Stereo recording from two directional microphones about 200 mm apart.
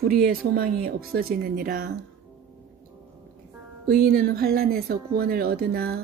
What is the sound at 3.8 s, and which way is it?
Speech, 50° right (ahead or behind).